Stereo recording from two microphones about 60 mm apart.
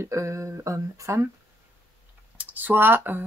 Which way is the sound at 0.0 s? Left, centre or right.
Right.